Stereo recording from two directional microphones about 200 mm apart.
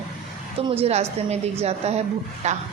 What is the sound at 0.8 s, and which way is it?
Speech, 35° right (ahead or behind).